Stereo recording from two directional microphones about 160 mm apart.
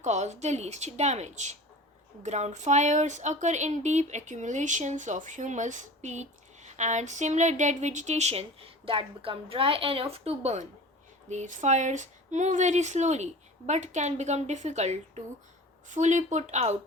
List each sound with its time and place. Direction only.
0.0 s a woman's voice: 45° right (ahead or behind)